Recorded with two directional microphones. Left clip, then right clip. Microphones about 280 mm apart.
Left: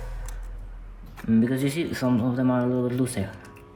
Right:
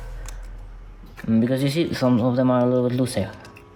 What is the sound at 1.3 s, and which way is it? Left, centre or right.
Speech, right.